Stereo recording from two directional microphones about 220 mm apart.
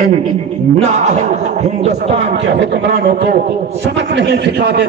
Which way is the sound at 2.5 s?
50° right (ahead or behind).